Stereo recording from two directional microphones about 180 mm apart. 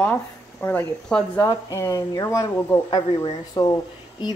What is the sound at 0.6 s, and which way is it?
Speech, 10° left (ahead or behind).